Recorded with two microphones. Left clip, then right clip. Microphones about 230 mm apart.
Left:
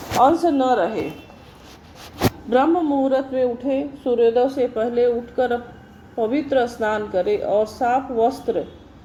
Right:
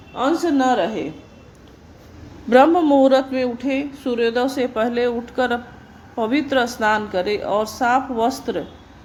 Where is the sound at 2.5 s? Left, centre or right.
Right.